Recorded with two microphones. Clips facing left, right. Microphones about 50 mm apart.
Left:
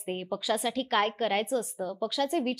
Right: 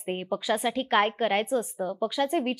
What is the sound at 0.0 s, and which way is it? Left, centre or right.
Speech, centre.